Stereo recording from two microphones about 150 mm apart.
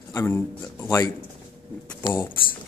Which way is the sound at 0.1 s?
20° left (ahead or behind).